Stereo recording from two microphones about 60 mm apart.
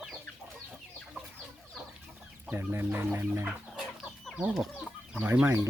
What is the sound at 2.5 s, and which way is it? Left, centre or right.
Speech, right.